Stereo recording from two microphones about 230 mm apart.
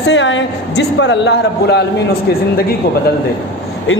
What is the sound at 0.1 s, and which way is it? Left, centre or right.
A man's voice, left.